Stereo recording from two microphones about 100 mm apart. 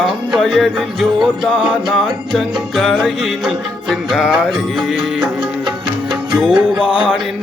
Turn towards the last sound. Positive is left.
turn(degrees=-10)  # may be behind; listen again after turning